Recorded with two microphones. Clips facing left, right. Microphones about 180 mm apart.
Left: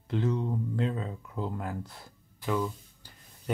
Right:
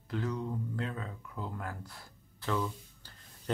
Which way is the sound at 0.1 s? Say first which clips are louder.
Left 5 dB; 25° left (ahead or behind).